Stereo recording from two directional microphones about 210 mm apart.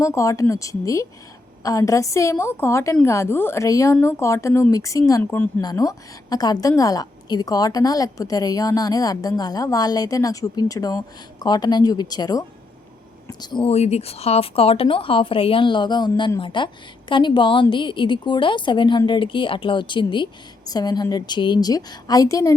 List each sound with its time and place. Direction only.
0.0 s speech: 15° left (ahead or behind)